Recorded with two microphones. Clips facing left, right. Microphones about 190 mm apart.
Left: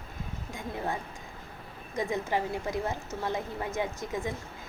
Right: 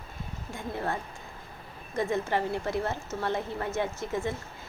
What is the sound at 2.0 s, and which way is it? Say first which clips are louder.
A woman's voice: right 2 dB; 15° left (ahead or behind).